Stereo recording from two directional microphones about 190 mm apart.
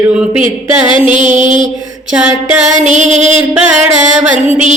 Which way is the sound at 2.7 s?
40° right (ahead or behind).